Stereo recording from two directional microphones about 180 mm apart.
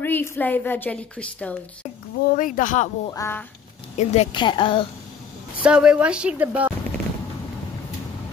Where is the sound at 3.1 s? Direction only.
15° left (ahead or behind).